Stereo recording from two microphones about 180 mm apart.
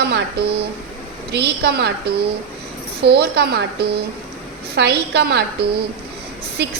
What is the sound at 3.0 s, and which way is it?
A woman's voice, 65° right (ahead or behind).